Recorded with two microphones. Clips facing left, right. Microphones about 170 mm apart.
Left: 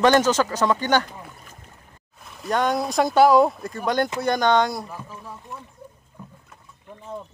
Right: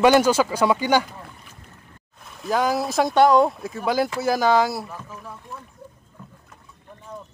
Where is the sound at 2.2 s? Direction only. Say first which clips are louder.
Right 1 dB; centre (ahead or behind).